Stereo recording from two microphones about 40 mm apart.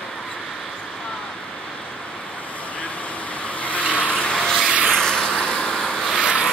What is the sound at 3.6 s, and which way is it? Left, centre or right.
Vehicle, left.